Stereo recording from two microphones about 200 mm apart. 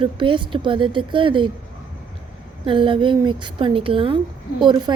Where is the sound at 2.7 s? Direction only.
25° right (ahead or behind).